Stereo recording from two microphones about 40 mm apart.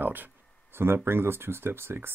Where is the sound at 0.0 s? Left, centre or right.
Right.